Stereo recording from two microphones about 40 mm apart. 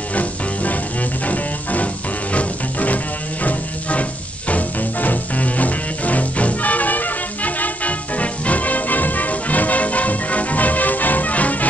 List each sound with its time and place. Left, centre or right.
0.1 s music: left
4.5 s music: left